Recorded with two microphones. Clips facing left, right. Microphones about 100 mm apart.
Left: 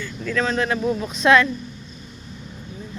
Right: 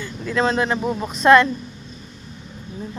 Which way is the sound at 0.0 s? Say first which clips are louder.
Right 2 dB; 20° right (ahead or behind).